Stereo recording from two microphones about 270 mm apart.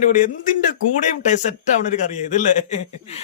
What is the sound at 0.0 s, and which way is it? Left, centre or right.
A man's voice, left.